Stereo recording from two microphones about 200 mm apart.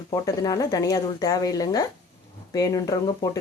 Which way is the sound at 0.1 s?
20° left (ahead or behind).